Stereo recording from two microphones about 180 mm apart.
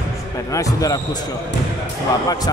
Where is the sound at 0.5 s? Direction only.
20° left (ahead or behind).